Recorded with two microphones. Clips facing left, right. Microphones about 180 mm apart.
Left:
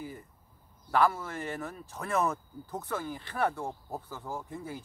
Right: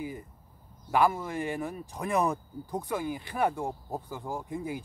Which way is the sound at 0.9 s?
15° right (ahead or behind).